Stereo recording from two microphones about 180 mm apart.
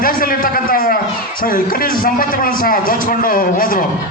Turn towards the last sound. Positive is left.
turn(degrees=50)  # may be behind; listen again after turning